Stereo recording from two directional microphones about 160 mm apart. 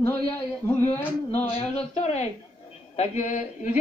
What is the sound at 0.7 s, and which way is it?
Speech, 10° left (ahead or behind).